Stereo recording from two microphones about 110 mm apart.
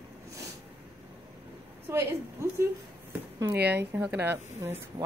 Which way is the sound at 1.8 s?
25° right (ahead or behind).